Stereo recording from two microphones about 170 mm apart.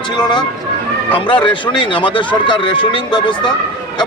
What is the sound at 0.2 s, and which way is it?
Speech, 25° left (ahead or behind).